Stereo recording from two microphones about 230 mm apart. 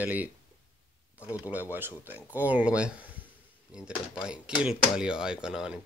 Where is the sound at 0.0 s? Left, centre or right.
Centre.